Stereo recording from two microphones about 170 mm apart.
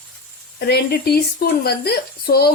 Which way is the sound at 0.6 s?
70° left (ahead or behind).